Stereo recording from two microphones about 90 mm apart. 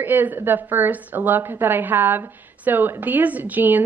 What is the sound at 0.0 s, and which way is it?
A woman's voice, 20° right (ahead or behind).